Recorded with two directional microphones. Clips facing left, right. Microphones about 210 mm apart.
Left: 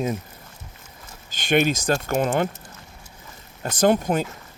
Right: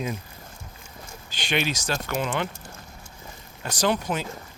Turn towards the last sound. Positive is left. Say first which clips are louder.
# left 6 dB
turn(degrees=45)  # may be behind; listen again after turning